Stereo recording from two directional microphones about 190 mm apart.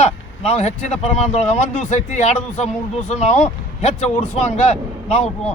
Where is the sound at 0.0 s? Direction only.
35° left (ahead or behind).